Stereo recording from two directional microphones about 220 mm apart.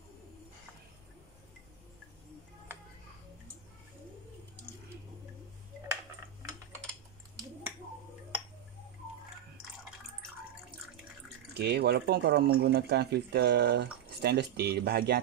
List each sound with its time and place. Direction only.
11.5 s speech: 50° right (ahead or behind)